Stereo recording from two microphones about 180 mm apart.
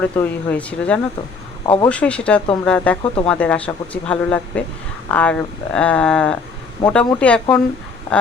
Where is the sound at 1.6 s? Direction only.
30° left (ahead or behind).